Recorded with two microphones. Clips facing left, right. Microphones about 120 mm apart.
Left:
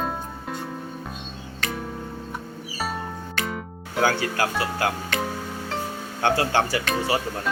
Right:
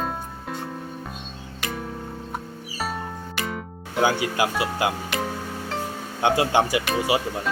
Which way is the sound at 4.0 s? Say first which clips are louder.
Right 1 dB; 15° right (ahead or behind).